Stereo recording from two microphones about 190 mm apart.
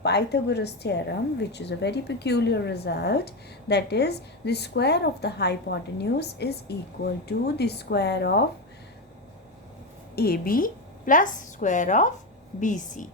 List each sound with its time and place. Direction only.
0.0 s a woman's voice: 60° left (ahead or behind)
10.2 s a woman's voice: 50° left (ahead or behind)